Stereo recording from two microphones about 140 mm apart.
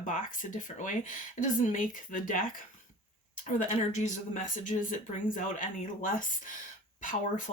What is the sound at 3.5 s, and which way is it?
Speech, 60° left (ahead or behind).